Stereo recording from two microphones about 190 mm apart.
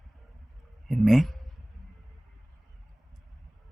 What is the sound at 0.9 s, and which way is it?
Speech, centre (ahead or behind).